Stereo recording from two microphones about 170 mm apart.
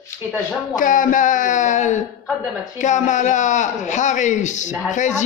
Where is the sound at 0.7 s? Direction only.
50° left (ahead or behind).